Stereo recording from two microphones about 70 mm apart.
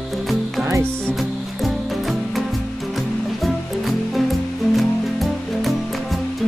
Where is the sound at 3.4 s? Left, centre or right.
Centre.